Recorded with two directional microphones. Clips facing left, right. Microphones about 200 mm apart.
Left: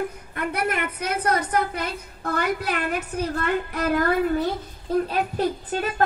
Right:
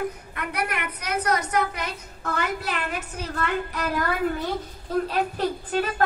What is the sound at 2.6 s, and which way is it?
Speech, 55° left (ahead or behind).